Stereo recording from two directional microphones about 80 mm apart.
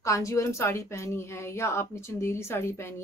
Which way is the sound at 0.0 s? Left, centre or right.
Left.